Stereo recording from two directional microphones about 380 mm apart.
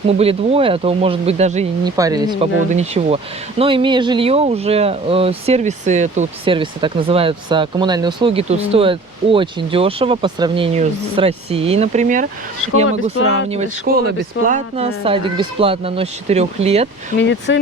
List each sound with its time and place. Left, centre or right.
0.1 s speech: centre
17.2 s speech: left